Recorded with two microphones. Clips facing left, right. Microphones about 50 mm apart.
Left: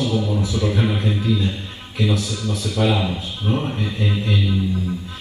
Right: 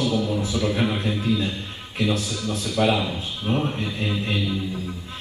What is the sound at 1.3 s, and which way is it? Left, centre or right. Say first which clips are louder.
Speech: left 1 dB; right.